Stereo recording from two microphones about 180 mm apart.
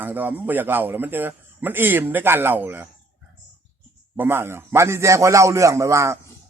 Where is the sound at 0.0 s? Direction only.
10° right (ahead or behind).